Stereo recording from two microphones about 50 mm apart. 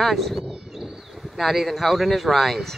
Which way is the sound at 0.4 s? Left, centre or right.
Centre.